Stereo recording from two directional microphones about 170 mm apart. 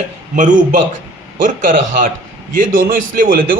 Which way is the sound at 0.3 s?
50° right (ahead or behind).